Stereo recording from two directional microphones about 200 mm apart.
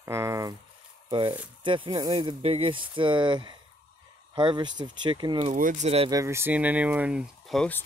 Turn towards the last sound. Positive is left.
turn(degrees=5)  # may be behind; listen again after turning